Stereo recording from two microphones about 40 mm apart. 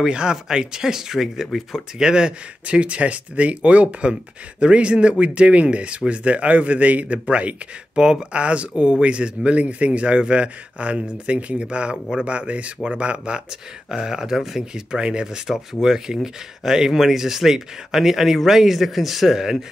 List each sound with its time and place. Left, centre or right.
0.1 s speech: right
2.0 s speech: centre
2.6 s speech: right
7.9 s speech: right
13.8 s speech: centre
14.6 s speech: centre
15.4 s speech: centre